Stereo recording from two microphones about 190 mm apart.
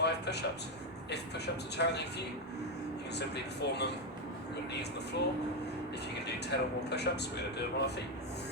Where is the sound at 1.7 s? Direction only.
60° left (ahead or behind).